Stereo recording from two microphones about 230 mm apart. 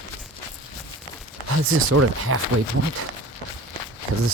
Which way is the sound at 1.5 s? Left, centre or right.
Right.